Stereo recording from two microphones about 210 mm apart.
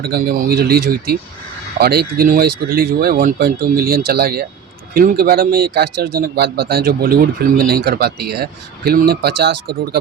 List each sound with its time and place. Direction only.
0.0 s speech: 45° right (ahead or behind)